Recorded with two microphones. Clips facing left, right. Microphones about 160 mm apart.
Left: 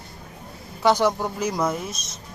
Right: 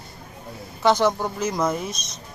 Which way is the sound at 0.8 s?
10° left (ahead or behind).